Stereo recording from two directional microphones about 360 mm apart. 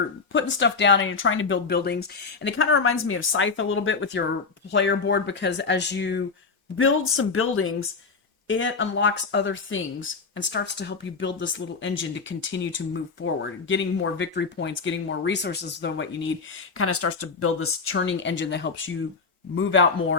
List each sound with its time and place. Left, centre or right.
0.3 s speech: left